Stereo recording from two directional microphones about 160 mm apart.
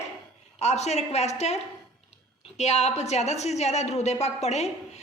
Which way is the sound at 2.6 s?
45° left (ahead or behind).